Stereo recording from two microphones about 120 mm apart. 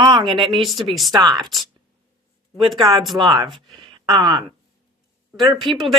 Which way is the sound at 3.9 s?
40° right (ahead or behind).